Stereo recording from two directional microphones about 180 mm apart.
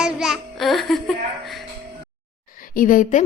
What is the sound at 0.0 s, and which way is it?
Music, centre (ahead or behind).